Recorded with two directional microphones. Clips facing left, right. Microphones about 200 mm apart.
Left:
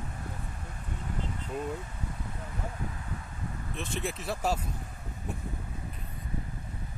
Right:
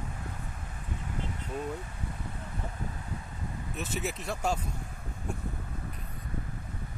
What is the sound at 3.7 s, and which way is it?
Speech, 5° right (ahead or behind).